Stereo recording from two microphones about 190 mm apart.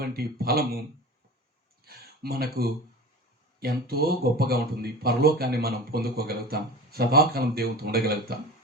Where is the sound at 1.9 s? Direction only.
55° right (ahead or behind).